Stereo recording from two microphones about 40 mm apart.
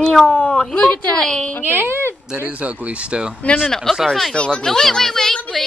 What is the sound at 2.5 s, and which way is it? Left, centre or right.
Speech, right.